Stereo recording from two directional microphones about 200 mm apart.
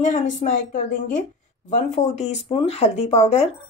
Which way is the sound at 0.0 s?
40° left (ahead or behind).